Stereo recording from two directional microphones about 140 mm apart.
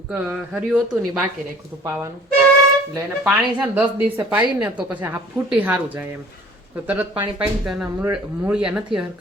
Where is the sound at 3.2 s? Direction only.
10° right (ahead or behind).